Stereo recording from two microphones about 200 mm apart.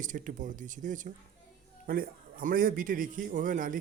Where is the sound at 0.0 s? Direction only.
40° right (ahead or behind).